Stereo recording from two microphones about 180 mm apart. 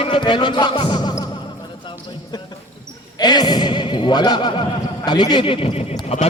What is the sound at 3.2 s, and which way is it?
A man's voice, 25° left (ahead or behind).